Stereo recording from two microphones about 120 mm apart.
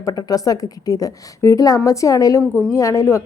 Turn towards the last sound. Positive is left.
turn(degrees=25)  # may be behind; listen again after turning